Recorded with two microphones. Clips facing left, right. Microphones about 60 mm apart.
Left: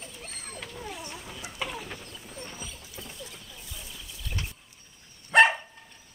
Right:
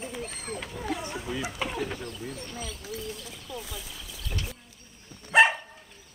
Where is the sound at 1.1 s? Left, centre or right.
Right.